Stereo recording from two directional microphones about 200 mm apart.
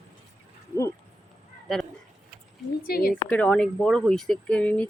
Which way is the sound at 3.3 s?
5° left (ahead or behind).